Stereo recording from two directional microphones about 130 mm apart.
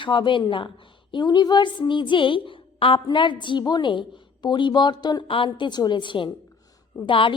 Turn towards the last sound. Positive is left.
turn(degrees=40)  # may be behind; listen again after turning